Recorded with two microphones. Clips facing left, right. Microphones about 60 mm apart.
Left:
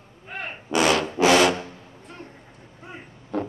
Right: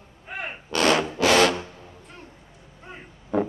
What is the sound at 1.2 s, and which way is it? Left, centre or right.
Music, left.